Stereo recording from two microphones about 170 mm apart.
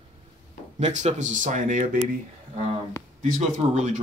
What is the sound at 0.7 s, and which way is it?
Speech, 45° right (ahead or behind).